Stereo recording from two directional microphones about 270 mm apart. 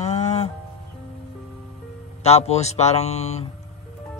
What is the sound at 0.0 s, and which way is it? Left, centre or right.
Music, left.